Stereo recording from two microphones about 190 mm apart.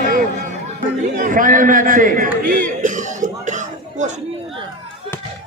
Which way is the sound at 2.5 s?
45° right (ahead or behind).